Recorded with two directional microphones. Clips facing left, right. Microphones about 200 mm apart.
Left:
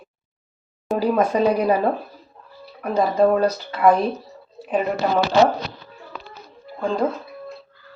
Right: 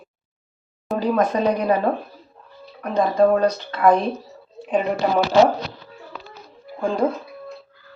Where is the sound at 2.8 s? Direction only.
10° left (ahead or behind).